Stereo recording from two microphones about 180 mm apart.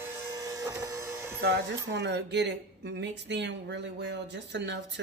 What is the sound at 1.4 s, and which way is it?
Speech, 70° right (ahead or behind).